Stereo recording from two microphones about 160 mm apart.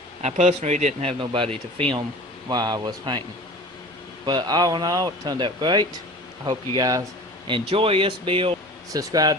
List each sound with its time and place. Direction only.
0.2 s speech: 45° right (ahead or behind)
1.2 s speech: 30° right (ahead or behind)
2.5 s speech: 25° right (ahead or behind)
4.3 s speech: 25° right (ahead or behind)
7.7 s speech: 35° right (ahead or behind)
8.9 s speech: 20° right (ahead or behind)